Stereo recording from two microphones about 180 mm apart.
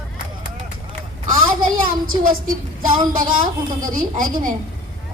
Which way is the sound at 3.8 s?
50° right (ahead or behind).